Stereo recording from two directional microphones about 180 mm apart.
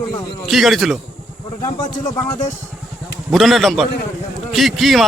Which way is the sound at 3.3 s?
Centre (ahead or behind).